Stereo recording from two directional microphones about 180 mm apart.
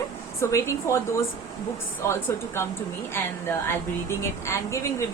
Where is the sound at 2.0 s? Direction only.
15° left (ahead or behind).